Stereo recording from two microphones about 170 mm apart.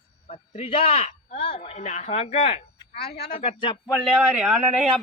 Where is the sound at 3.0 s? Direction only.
70° left (ahead or behind).